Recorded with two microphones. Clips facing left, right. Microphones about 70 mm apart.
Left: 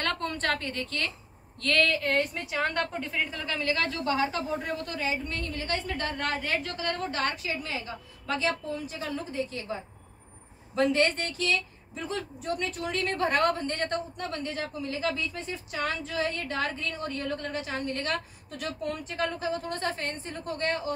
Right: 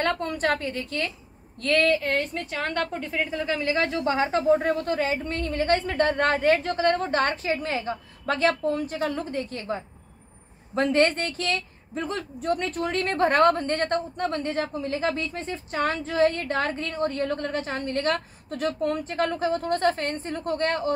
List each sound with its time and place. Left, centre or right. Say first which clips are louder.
0.0 s a woman's voice: right 5 dB; centre
2.0 s a woman's voice: right 1 dB; centre
3.3 s speech: right 6 dB; centre; by 4.6 s right
4.6 s a woman's voice: right 9 dB; right